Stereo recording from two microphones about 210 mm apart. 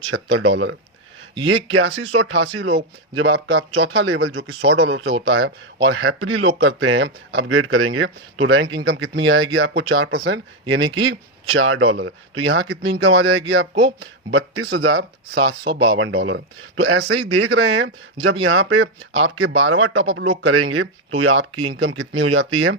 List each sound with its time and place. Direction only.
0.1 s speech: 85° right
1.7 s speech: 70° right (ahead or behind)
3.8 s speech: 70° right (ahead or behind)
5.3 s speech: 60° right (ahead or behind); by 6.5 s 80° right
6.6 s speech: 65° right (ahead or behind)
8.9 s speech: 55° right (ahead or behind)
10.9 s speech: 70° right (ahead or behind)
14.3 s speech: 70° right (ahead or behind)
14.9 s speech: 55° right (ahead or behind)
16.0 s speech: 70° right (ahead or behind)
17.1 s speech: 90° right
21.2 s speech: 70° right (ahead or behind)